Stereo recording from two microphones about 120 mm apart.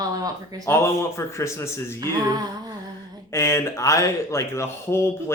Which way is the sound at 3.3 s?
25° left (ahead or behind).